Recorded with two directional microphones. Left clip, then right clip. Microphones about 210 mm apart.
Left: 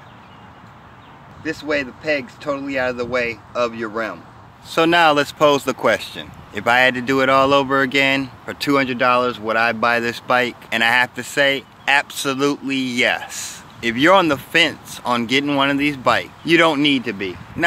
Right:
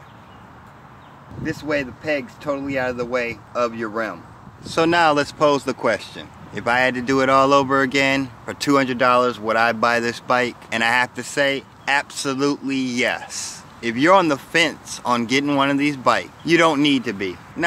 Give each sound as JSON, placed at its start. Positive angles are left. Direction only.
{"t": 1.4, "sound": "speech", "side_deg": -5}